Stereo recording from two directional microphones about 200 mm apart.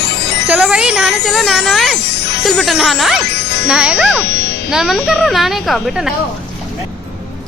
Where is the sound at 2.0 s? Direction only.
55° left (ahead or behind).